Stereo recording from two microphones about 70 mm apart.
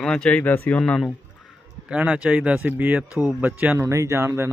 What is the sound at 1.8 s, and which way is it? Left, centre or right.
Speech, right.